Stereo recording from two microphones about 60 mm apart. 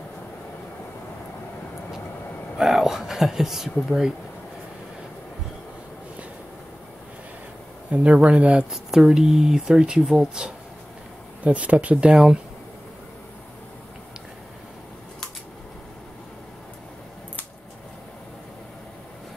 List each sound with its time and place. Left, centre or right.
2.5 s speech: centre
7.9 s speech: right
8.6 s speech: centre